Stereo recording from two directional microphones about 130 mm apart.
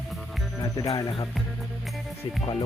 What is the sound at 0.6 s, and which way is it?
Speech, 25° left (ahead or behind).